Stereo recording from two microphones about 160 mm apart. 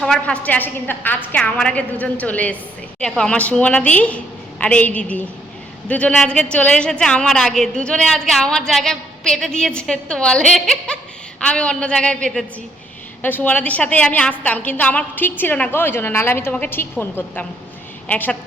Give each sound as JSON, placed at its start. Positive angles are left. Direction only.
{"t": 0.0, "sound": "a woman's voice", "side_deg": 5}